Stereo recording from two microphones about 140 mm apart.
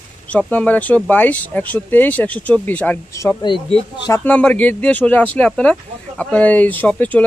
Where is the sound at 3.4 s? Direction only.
35° left (ahead or behind).